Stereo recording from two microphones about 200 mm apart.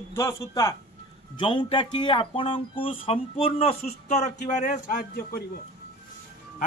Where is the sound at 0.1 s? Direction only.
15° left (ahead or behind); by 5.4 s 45° left (ahead or behind).